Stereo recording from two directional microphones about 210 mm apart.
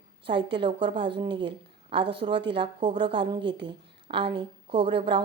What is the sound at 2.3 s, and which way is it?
Speech, 55° right (ahead or behind).